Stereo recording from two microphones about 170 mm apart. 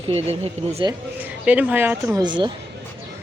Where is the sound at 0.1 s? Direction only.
35° right (ahead or behind).